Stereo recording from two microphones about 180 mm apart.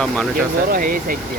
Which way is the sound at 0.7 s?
50° right (ahead or behind).